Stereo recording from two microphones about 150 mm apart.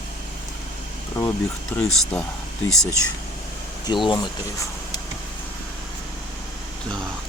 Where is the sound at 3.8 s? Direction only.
30° left (ahead or behind).